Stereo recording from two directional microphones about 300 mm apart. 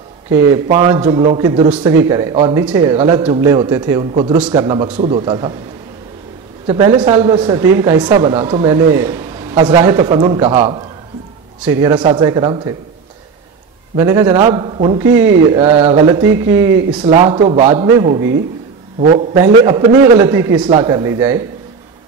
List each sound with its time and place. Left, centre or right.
0.3 s speech: centre
6.7 s speech: centre
13.9 s speech: centre
15.5 s speech: centre
19.3 s speech: centre